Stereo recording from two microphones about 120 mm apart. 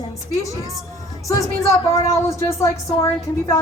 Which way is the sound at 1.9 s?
25° left (ahead or behind).